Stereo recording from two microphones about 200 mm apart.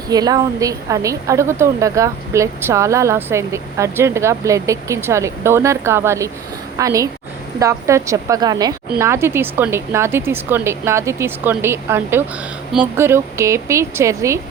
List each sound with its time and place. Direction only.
0.1 s speech: 20° right (ahead or behind)